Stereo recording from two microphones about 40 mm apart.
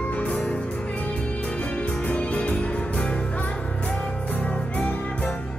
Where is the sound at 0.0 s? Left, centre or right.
Left.